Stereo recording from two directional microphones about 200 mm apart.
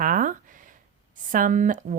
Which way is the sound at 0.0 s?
40° right (ahead or behind).